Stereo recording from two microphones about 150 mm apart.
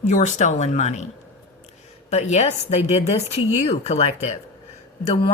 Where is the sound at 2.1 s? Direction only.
45° left (ahead or behind).